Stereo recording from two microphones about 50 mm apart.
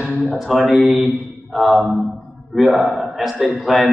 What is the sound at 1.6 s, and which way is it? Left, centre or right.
Mantra, centre.